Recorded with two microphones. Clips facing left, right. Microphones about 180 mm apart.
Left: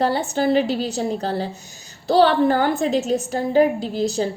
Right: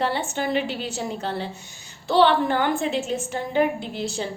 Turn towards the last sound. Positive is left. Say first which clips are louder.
# left 7 dB
turn(degrees=40)  # may be behind; listen again after turning